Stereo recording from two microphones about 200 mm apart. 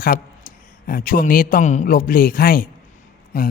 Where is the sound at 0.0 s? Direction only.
45° left (ahead or behind).